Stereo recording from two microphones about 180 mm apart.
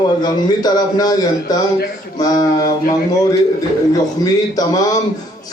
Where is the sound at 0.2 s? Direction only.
20° left (ahead or behind).